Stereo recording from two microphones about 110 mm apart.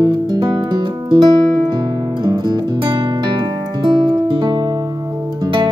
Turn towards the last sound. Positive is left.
turn(degrees=-45)  # may be behind; listen again after turning